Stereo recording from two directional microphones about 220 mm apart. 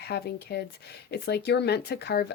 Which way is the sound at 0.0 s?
45° left (ahead or behind).